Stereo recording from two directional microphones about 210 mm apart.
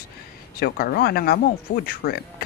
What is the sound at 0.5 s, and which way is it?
Speech, 45° left (ahead or behind).